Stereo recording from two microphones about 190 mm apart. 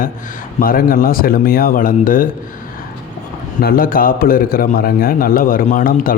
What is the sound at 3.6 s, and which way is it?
A man's voice, 50° left (ahead or behind).